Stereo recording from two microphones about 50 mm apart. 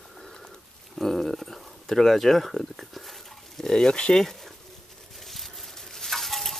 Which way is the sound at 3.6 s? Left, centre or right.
Centre.